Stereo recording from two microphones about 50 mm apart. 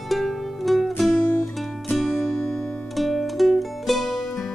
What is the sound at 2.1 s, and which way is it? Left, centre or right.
Music, centre.